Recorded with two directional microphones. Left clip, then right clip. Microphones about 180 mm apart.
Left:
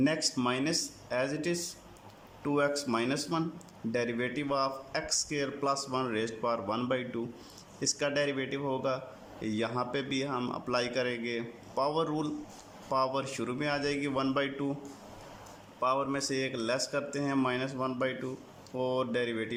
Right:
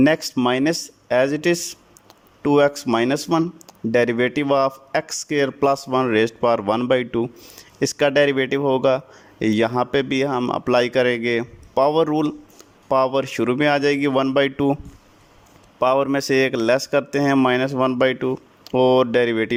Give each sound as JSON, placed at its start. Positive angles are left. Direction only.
{"t": 0.0, "sound": "a man's voice", "side_deg": -45}
{"t": 15.8, "sound": "a man's voice", "side_deg": -45}